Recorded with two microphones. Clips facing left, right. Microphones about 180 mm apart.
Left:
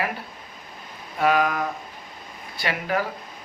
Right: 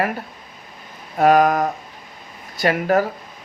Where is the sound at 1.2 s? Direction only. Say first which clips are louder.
Right 7 dB; 45° right (ahead or behind).